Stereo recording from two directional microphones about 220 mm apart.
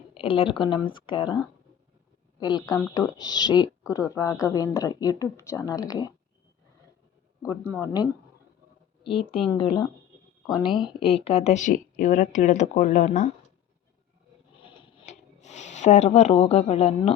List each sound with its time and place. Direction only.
0.1 s speech: 25° left (ahead or behind)
2.4 s speech: 20° left (ahead or behind)
7.4 s speech: 10° left (ahead or behind)
9.0 s speech: 25° left (ahead or behind)
14.6 s a sound: 30° left (ahead or behind)